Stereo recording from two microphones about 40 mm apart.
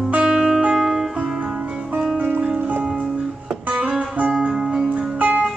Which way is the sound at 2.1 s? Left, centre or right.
Right.